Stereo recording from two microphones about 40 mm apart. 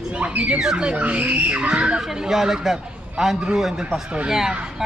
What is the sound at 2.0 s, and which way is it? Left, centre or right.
A man's voice, centre.